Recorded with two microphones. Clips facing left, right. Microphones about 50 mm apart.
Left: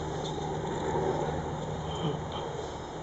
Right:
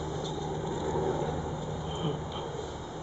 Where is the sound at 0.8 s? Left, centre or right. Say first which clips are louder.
Left 1 dB; centre.